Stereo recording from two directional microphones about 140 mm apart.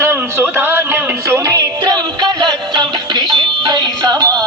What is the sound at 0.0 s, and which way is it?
Music, 15° right (ahead or behind).